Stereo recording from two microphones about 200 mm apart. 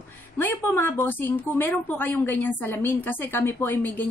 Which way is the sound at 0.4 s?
10° left (ahead or behind).